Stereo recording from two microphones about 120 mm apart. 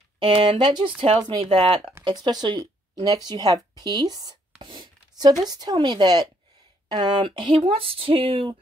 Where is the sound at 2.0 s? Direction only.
40° right (ahead or behind).